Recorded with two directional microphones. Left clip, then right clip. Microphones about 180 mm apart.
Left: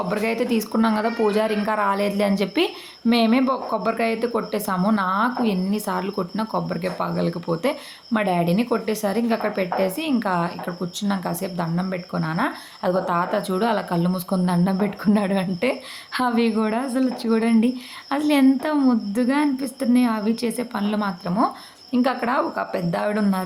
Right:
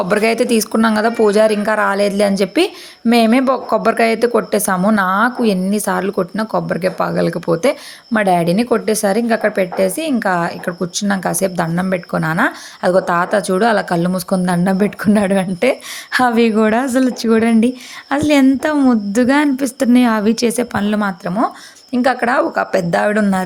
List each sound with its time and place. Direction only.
0.1 s a woman's voice: 30° right (ahead or behind)